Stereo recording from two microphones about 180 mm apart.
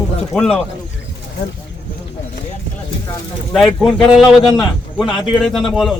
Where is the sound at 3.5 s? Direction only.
Centre (ahead or behind).